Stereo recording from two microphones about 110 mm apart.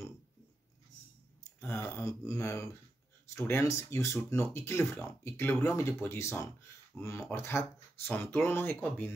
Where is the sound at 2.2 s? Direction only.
25° left (ahead or behind).